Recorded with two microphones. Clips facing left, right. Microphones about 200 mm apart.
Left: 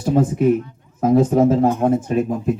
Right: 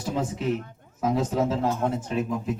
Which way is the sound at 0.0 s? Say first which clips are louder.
Left 11 dB; 55° left (ahead or behind).